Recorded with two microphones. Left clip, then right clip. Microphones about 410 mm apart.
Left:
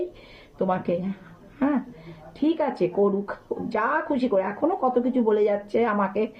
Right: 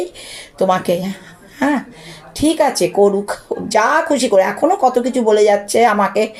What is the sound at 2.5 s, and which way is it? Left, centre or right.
Speech, left.